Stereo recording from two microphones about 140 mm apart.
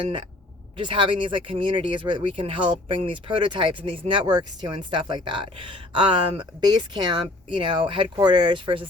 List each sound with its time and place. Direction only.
0.8 s speech: 35° right (ahead or behind)